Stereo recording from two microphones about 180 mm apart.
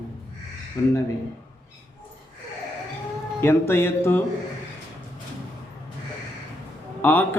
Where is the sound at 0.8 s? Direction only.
15° left (ahead or behind).